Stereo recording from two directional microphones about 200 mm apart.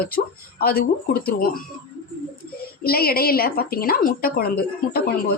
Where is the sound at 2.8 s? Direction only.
50° left (ahead or behind).